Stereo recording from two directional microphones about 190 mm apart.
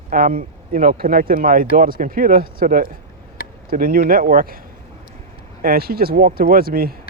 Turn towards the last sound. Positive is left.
turn(degrees=-50)  # may be behind; listen again after turning